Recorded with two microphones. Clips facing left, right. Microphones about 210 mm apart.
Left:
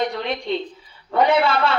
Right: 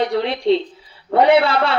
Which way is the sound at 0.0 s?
30° right (ahead or behind).